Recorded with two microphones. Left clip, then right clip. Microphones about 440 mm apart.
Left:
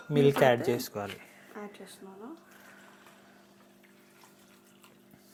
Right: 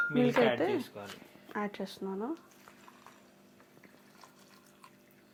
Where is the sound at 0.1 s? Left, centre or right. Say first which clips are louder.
Left 4 dB; left.